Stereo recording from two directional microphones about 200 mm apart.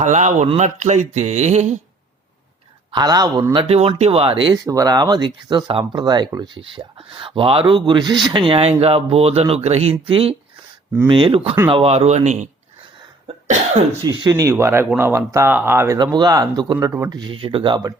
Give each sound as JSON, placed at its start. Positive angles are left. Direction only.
{"t": 0.0, "sound": "speech", "side_deg": -35}
{"t": 2.9, "sound": "speech", "side_deg": -20}
{"t": 14.0, "sound": "speech", "side_deg": -20}